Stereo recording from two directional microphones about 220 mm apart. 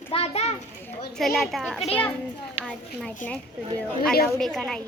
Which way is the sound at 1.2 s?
Centre (ahead or behind).